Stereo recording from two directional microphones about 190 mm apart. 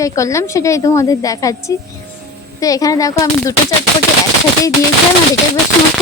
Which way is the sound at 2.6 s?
20° left (ahead or behind).